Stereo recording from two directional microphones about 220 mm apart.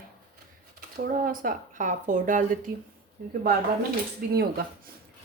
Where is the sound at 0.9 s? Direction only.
40° right (ahead or behind).